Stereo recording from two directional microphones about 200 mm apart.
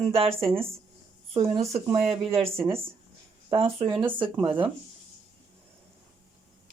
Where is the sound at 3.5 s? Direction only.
25° right (ahead or behind).